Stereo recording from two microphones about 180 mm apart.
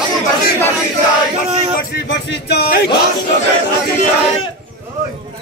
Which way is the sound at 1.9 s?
70° left (ahead or behind).